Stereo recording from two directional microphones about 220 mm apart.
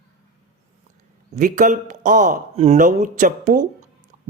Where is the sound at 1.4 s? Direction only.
35° right (ahead or behind).